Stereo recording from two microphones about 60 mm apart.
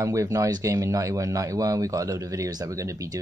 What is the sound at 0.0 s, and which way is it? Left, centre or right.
Speech, right.